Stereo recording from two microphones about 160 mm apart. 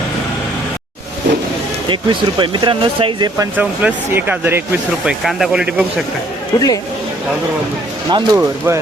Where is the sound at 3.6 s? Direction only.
10° right (ahead or behind).